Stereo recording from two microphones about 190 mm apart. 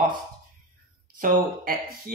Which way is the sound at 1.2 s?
45° right (ahead or behind).